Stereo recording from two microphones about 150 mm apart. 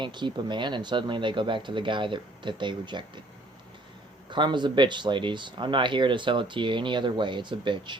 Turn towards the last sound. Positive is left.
turn(degrees=-30)  # may be behind; listen again after turning